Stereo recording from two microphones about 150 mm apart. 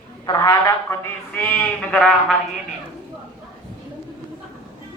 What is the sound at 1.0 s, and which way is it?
A man's voice, 10° left (ahead or behind).